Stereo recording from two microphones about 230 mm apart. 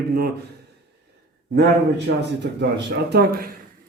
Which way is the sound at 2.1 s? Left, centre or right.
Right.